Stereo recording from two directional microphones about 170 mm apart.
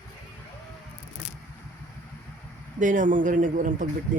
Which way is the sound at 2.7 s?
50° right (ahead or behind).